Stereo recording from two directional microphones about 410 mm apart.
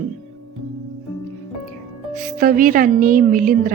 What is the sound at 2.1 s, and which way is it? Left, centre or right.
A woman's voice, centre.